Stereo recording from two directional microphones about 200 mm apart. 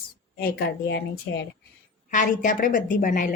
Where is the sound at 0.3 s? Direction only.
55° left (ahead or behind).